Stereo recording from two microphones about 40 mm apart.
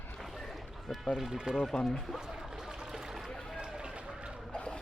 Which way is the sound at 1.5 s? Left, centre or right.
Right.